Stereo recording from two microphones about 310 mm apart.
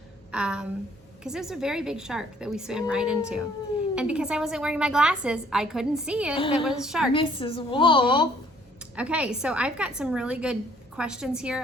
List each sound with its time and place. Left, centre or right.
0.3 s a woman's voice: centre
7.1 s a woman's voice: centre
9.0 s a woman's voice: centre